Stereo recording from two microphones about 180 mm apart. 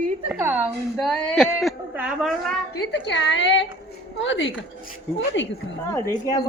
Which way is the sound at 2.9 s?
70° left (ahead or behind).